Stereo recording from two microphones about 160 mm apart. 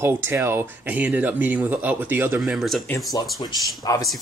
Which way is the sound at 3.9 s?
20° left (ahead or behind).